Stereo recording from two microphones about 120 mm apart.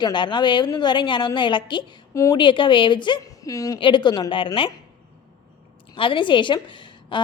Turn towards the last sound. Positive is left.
turn(degrees=40)  # may be behind; listen again after turning